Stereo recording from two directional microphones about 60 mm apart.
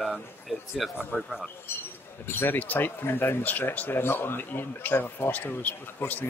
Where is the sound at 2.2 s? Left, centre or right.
Left.